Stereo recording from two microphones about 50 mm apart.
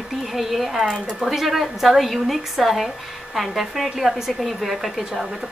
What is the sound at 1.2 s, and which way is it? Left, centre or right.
A woman's voice, centre.